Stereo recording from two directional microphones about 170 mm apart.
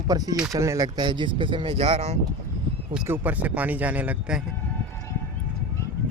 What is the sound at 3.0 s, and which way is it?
Speech, 10° right (ahead or behind).